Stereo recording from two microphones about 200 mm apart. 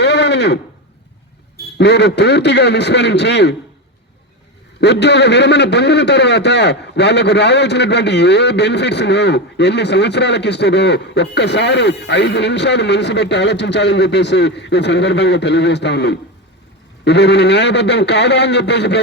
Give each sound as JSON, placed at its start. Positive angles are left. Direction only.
{"t": 0.0, "sound": "a sound", "side_deg": 60}
{"t": 1.8, "sound": "a man's voice", "side_deg": 60}
{"t": 4.8, "sound": "a man's voice", "side_deg": 60}